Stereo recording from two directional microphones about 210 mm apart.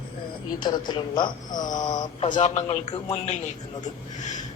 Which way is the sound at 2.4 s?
30° left (ahead or behind).